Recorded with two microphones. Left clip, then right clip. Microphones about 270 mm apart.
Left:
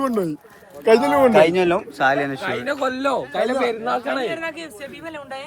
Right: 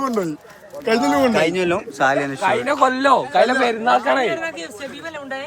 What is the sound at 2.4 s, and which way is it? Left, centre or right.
A man's voice, right.